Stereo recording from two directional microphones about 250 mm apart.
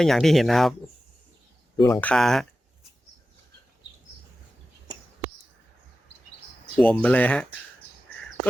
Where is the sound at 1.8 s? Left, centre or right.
Centre.